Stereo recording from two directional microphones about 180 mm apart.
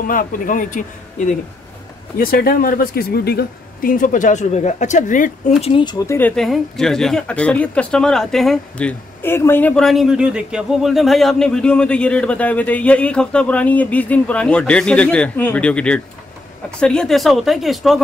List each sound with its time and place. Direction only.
0.0 s speech: 50° left (ahead or behind)
5.6 s speech: 30° left (ahead or behind); by 18.0 s centre (ahead or behind)